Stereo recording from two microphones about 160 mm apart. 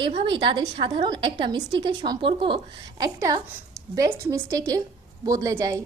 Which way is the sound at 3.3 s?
20° right (ahead or behind).